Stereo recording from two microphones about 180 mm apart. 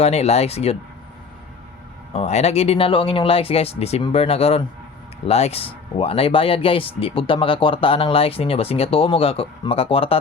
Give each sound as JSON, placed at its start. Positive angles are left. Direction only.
{"t": 0.0, "sound": "speech", "side_deg": 35}
{"t": 2.1, "sound": "speech", "side_deg": 35}